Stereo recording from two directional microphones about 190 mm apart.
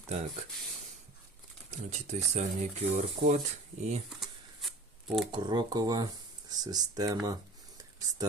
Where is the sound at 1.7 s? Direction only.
35° right (ahead or behind).